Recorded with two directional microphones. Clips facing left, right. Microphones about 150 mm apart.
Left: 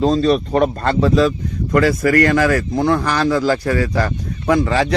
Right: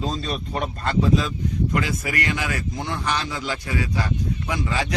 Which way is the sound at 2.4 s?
75° left (ahead or behind).